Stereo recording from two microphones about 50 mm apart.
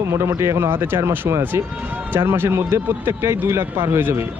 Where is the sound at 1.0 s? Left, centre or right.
Right.